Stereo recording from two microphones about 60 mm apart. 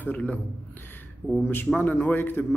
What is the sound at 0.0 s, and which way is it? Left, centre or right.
Speech, left.